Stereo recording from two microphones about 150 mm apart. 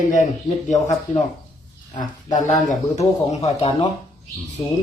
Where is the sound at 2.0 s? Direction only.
55° left (ahead or behind).